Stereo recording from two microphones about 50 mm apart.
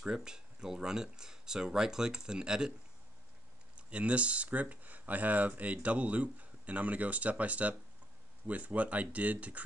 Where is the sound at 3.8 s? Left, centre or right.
Right.